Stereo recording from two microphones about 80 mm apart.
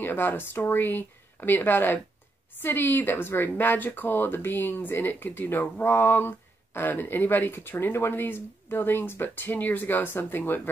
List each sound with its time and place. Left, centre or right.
0.0 s speech: left